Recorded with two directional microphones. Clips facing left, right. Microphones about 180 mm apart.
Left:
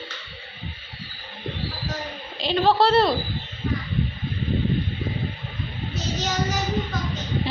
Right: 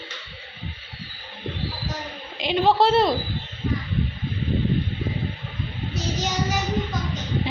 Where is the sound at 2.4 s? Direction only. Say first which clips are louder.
Even; 15° right (ahead or behind).